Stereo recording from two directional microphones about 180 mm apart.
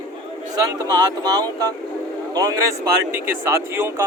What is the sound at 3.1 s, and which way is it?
Speech, 15° right (ahead or behind).